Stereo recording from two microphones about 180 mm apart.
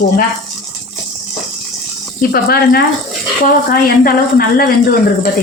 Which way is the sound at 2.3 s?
60° left (ahead or behind).